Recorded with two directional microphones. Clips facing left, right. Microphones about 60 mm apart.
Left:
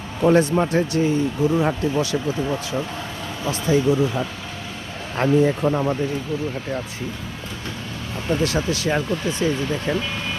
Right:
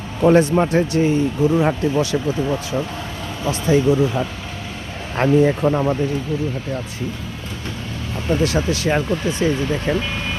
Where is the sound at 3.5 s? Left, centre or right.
Right.